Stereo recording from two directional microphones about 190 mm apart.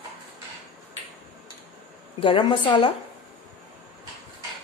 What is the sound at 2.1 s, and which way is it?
Speech, 25° left (ahead or behind).